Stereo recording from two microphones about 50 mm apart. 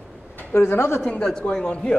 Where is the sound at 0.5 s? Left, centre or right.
Left.